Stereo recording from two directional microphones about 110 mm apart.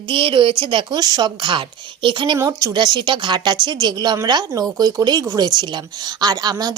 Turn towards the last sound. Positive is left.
turn(degrees=-35)  # may be behind; listen again after turning